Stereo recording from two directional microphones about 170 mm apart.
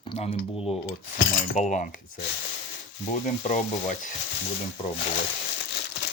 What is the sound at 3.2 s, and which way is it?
Frying, 45° left (ahead or behind).